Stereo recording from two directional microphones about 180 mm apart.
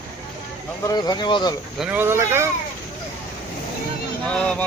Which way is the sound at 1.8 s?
10° right (ahead or behind).